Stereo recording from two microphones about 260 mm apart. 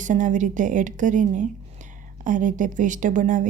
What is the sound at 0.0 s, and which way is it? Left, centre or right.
A woman's voice, right.